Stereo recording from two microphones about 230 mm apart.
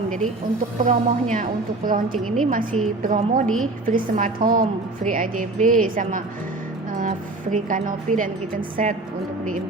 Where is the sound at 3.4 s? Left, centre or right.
Centre.